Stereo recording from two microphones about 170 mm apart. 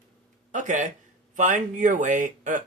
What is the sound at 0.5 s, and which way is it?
Speech, 50° right (ahead or behind).